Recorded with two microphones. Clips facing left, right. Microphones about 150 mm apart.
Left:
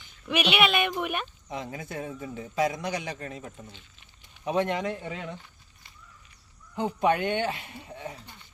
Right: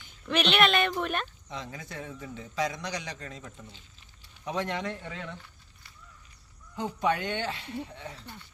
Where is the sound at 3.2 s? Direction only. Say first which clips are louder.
Left 4 dB; 15° left (ahead or behind).